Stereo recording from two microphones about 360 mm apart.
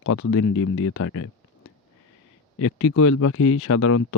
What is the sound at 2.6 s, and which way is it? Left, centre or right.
Speech, left.